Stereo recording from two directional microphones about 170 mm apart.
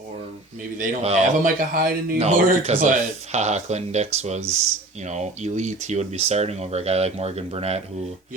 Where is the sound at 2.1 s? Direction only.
40° right (ahead or behind).